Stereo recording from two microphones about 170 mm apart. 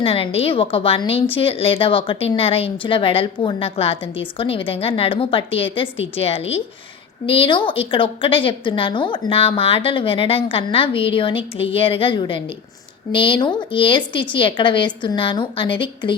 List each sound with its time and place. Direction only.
0.0 s a woman's voice: 35° left (ahead or behind)